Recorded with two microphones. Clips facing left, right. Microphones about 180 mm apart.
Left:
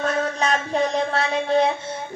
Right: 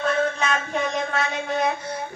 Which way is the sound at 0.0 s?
35° left (ahead or behind).